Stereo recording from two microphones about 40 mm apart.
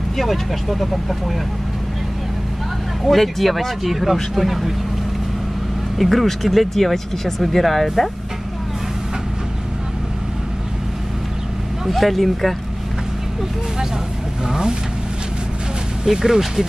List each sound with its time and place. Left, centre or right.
0.2 s speech: centre
3.1 s speech: centre
5.9 s speech: centre
11.8 s speech: centre
14.5 s speech: right
16.1 s speech: centre